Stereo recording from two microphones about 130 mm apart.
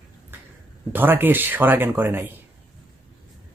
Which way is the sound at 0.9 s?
15° right (ahead or behind).